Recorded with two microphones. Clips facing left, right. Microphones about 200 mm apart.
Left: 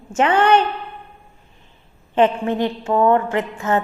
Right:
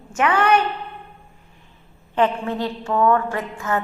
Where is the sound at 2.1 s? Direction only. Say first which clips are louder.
Left 4 dB; 20° left (ahead or behind).